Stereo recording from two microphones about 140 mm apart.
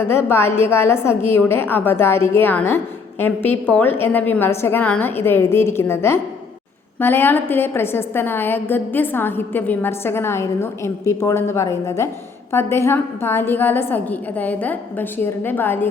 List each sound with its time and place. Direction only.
0.0 s a woman's voice: 15° left (ahead or behind)